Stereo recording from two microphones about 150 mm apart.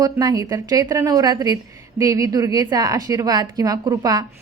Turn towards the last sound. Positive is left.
turn(degrees=-25)  # may be behind; listen again after turning